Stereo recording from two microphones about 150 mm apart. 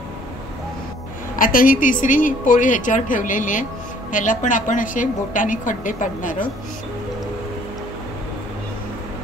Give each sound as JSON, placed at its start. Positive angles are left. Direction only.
{"t": 1.4, "sound": "a woman's voice", "side_deg": 65}